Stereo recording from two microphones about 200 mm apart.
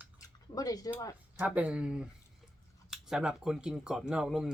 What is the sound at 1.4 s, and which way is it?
Speech, 5° right (ahead or behind).